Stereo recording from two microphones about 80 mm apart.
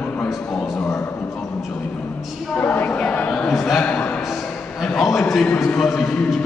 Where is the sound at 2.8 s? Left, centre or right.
Centre.